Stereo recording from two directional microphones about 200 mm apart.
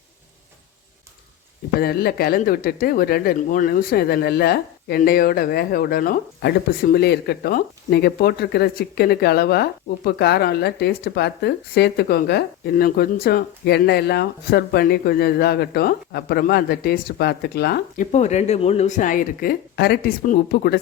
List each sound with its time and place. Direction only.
1.8 s speech: 50° left (ahead or behind)